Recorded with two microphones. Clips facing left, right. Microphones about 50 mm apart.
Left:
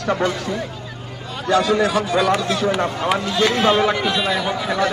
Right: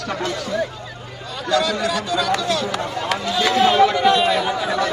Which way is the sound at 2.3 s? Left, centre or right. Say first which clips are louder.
Left 1 dB; centre.